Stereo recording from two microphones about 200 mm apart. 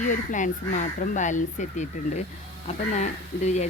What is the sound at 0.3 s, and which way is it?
Speech, 40° left (ahead or behind).